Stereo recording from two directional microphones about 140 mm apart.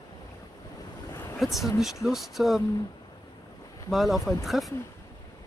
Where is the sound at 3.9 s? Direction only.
Centre (ahead or behind).